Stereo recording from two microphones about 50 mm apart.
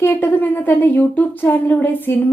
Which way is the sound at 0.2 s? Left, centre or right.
Left.